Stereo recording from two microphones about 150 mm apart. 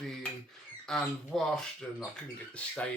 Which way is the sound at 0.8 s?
5° left (ahead or behind).